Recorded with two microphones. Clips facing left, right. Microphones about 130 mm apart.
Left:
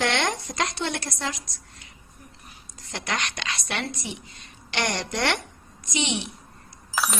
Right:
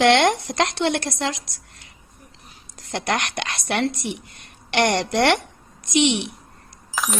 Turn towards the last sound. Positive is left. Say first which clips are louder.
# right 1 dB
turn(degrees=0)  # may be behind; listen again after turning